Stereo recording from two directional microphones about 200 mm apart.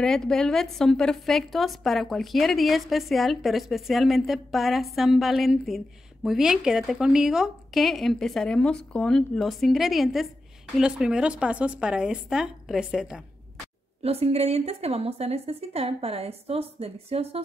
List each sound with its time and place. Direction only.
0.0 s a woman's voice: centre (ahead or behind)
14.0 s a woman's voice: 30° right (ahead or behind)